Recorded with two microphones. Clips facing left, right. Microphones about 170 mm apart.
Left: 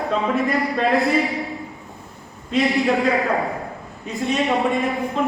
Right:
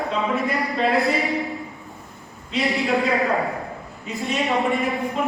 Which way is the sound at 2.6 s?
Centre (ahead or behind).